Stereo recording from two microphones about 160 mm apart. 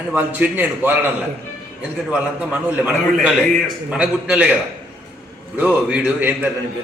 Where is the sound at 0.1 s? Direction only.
10° right (ahead or behind).